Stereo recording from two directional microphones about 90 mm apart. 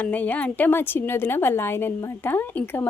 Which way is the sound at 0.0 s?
20° left (ahead or behind).